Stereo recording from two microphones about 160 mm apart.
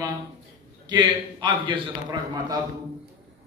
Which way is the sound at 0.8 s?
30° right (ahead or behind).